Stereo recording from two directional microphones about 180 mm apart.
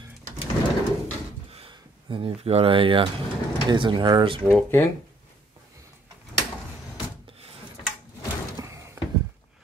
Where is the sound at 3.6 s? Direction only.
25° right (ahead or behind).